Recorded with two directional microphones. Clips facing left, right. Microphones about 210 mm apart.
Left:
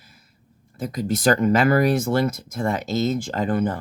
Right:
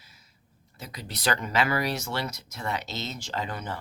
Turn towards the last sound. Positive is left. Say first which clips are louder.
# left 11 dB
turn(degrees=50)  # may be behind; listen again after turning